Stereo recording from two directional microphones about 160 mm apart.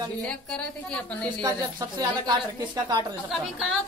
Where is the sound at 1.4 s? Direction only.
25° right (ahead or behind).